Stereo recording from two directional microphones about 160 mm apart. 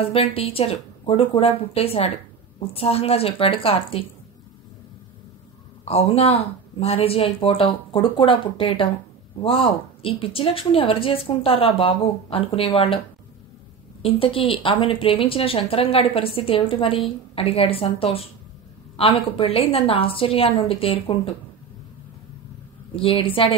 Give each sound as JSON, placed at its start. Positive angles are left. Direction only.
{"t": 0.0, "sound": "speech", "side_deg": 35}
{"t": 5.9, "sound": "speech", "side_deg": 40}
{"t": 14.0, "sound": "speech", "side_deg": 35}
{"t": 22.9, "sound": "speech", "side_deg": 35}